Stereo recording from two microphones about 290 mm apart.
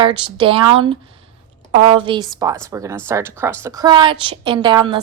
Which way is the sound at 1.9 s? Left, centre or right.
Centre.